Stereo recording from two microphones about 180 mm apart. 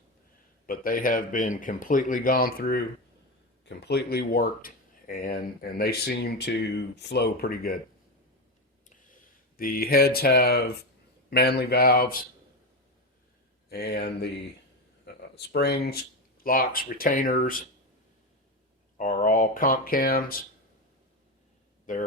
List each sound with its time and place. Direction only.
0.7 s speech: 50° left (ahead or behind)
9.6 s speech: 55° left (ahead or behind)
13.7 s speech: 60° left (ahead or behind)
15.0 s a sound: 65° left (ahead or behind)
16.4 s speech: 55° left (ahead or behind)
19.2 s speech: 50° left (ahead or behind)